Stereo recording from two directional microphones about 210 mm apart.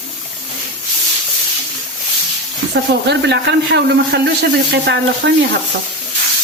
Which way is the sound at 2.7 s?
55° right (ahead or behind).